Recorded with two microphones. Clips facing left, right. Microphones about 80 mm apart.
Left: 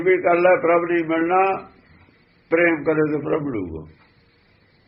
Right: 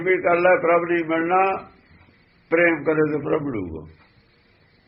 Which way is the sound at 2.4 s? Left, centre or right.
Centre.